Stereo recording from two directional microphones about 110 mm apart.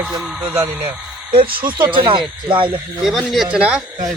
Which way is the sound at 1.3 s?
50° right (ahead or behind).